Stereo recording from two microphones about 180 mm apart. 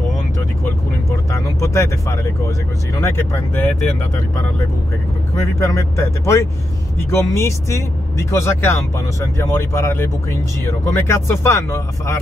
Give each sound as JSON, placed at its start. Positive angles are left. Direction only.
{"t": 1.3, "sound": "speech", "side_deg": 15}
{"t": 5.3, "sound": "speech", "side_deg": 15}